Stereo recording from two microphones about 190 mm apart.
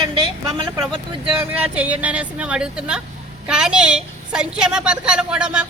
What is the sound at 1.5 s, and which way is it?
A woman's voice, 5° right (ahead or behind).